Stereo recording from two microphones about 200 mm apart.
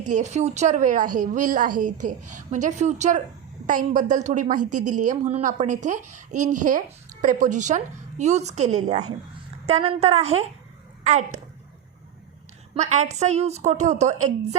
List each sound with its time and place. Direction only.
0.1 s a woman's voice: 35° right (ahead or behind)
12.7 s a woman's voice: 35° right (ahead or behind)